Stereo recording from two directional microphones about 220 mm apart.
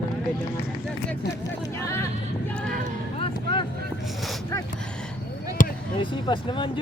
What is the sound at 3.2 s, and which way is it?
Vehicle, 20° left (ahead or behind).